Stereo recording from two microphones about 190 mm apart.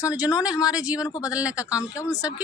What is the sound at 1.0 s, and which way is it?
Speech, 20° left (ahead or behind).